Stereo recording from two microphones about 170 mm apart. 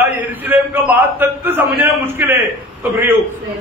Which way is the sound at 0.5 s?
10° right (ahead or behind).